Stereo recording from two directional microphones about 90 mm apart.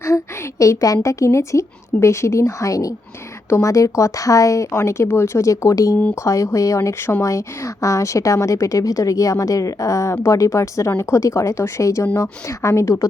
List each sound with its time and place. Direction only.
0.6 s speech: 40° left (ahead or behind)